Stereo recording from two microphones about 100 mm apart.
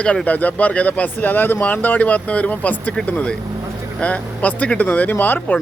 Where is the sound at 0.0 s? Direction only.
10° left (ahead or behind).